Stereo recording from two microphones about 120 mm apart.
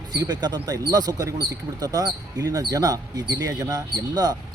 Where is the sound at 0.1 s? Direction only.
35° right (ahead or behind).